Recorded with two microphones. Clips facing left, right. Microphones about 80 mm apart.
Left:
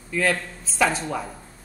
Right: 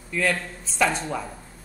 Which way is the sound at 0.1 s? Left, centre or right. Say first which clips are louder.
Left 2 dB; centre.